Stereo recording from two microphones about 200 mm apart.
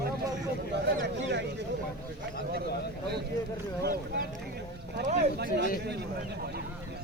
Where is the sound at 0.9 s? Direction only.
60° right (ahead or behind).